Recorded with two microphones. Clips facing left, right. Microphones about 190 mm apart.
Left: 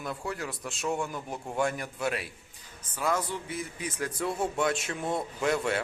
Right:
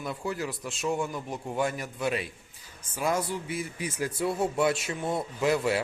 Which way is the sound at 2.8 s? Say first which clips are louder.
Right 1 dB; 10° right (ahead or behind).